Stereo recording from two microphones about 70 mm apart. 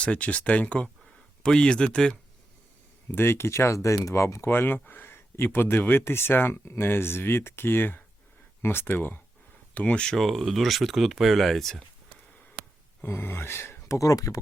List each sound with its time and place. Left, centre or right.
0.0 s speech: centre
3.1 s speech: left
10.1 s speech: centre
13.0 s speech: left